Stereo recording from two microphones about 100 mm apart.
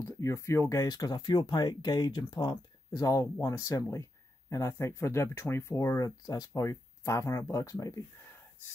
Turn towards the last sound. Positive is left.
turn(degrees=30)  # may be behind; listen again after turning